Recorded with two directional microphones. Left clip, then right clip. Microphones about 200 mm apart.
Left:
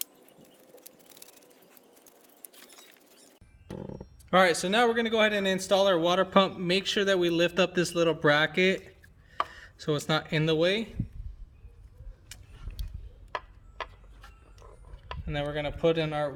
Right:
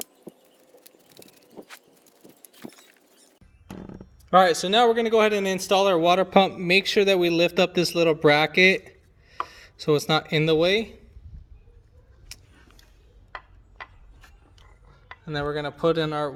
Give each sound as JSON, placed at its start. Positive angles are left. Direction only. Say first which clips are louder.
{"t": 0.0, "sound": "a sound", "louder": "right 4 dB", "side_deg": 0}
{"t": 2.0, "sound": "rodents", "louder": "right 3 dB", "side_deg": 0}
{"t": 4.3, "sound": "speech", "louder": "right 5 dB", "side_deg": -15}
{"t": 15.4, "sound": "speech", "louder": "right 3 dB", "side_deg": -35}